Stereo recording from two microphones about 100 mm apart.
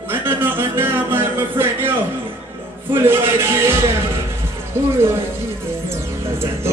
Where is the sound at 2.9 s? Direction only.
25° right (ahead or behind).